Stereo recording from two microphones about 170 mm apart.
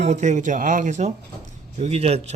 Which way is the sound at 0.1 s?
45° right (ahead or behind).